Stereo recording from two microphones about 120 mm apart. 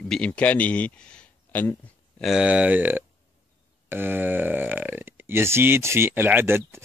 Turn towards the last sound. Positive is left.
turn(degrees=-20)  # may be behind; listen again after turning